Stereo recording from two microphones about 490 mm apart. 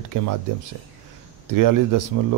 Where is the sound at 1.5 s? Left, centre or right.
Right.